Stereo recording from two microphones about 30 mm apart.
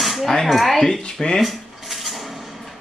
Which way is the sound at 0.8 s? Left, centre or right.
Left.